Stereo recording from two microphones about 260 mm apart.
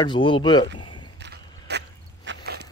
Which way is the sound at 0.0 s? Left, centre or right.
Centre.